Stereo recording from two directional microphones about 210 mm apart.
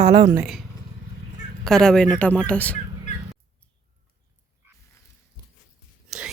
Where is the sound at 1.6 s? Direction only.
Centre (ahead or behind).